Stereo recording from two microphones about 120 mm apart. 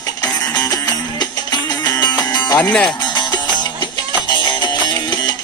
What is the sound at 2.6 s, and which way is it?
Speech, 10° left (ahead or behind).